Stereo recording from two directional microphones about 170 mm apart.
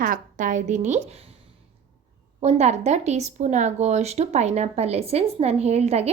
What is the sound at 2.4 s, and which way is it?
A woman's voice, 40° right (ahead or behind).